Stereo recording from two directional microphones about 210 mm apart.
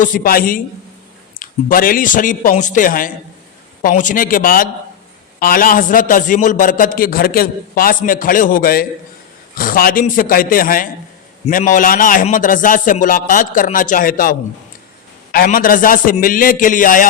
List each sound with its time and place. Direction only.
0.0 s a man's voice: 40° left (ahead or behind)